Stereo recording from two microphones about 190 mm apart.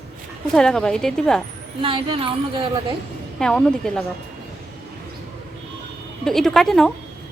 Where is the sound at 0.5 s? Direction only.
5° left (ahead or behind).